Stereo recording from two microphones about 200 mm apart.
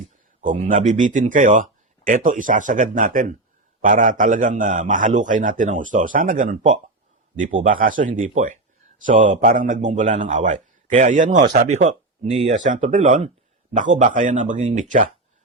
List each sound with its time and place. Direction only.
0.4 s a man's voice: 40° right (ahead or behind)